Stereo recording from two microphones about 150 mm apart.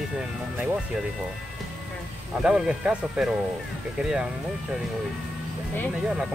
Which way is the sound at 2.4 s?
5° right (ahead or behind).